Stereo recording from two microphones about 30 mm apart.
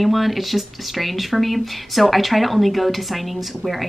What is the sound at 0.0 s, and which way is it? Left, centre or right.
Speech, centre.